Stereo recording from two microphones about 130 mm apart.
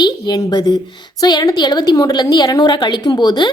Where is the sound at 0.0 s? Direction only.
30° left (ahead or behind).